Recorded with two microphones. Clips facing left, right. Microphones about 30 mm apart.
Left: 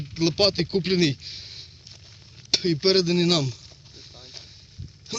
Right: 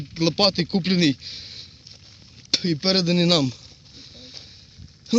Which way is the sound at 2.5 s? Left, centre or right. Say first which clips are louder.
Even; right.